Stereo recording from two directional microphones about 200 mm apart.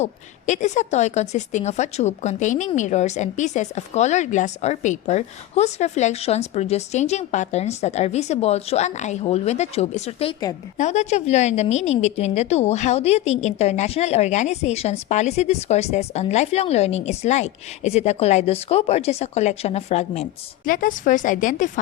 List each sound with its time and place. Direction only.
0.0 s a woman's voice: 35° left (ahead or behind)
20.7 s a woman's voice: 45° left (ahead or behind)